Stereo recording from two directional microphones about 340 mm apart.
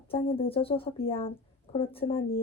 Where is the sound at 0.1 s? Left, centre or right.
Centre.